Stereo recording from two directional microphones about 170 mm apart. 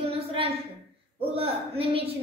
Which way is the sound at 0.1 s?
35° right (ahead or behind).